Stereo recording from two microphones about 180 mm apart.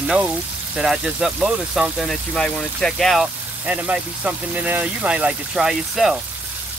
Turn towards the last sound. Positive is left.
turn(degrees=0)  # may be behind; listen again after turning